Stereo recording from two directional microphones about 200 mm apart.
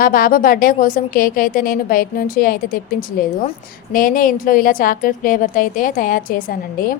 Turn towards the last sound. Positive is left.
turn(degrees=45)  # may be behind; listen again after turning